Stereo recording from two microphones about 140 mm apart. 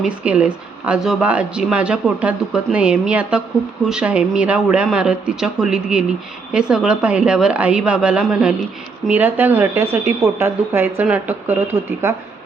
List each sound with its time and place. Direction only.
0.0 s speech: 10° right (ahead or behind)